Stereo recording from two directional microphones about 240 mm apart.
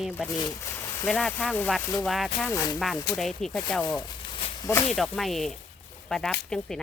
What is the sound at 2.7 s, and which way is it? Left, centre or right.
Speech, centre.